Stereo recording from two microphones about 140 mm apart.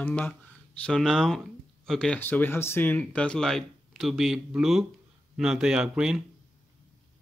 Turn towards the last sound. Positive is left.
turn(degrees=-5)  # may be behind; listen again after turning